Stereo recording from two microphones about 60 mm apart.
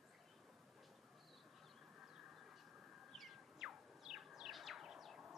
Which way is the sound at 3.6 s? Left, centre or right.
Centre.